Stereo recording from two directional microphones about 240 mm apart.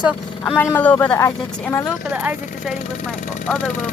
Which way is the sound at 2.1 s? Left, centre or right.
Centre.